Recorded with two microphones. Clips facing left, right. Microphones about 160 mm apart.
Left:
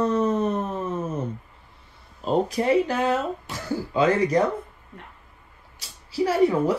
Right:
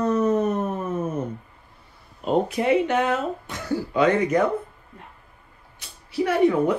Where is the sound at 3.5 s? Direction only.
30° left (ahead or behind).